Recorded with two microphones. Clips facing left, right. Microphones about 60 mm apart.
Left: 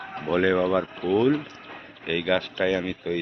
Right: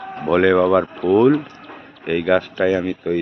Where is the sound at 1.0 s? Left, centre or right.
Right.